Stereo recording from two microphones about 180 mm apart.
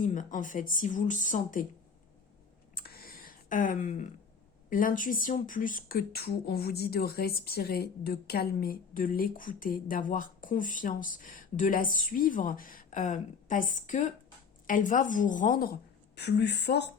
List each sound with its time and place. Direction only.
0.0 s speech: 45° left (ahead or behind)
2.7 s a sound: 55° left (ahead or behind)
4.7 s speech: 50° left (ahead or behind)
16.1 s speech: 65° left (ahead or behind)